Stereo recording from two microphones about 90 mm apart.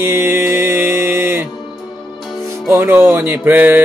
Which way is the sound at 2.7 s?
25° right (ahead or behind).